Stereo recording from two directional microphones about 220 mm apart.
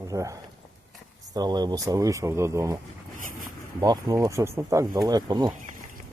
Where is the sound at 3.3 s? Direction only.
40° right (ahead or behind).